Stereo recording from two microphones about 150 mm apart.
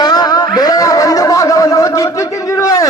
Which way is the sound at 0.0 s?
25° left (ahead or behind).